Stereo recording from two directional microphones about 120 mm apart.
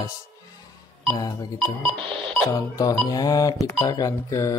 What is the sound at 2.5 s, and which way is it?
Speech, 30° left (ahead or behind).